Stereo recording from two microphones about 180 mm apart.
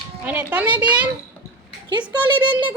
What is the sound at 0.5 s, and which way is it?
Speech, 10° right (ahead or behind).